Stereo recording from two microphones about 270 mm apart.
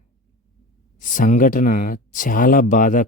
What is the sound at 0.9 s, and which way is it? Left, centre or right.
Speech, left.